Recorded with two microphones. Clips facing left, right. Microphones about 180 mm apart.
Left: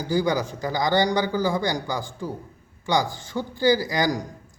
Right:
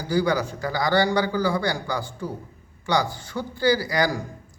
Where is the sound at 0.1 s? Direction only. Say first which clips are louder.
Right 1 dB; 15° left (ahead or behind).